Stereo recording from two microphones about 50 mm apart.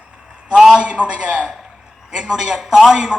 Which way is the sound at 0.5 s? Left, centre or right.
Centre.